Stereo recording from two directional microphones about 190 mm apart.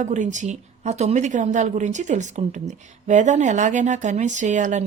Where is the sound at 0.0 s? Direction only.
40° right (ahead or behind).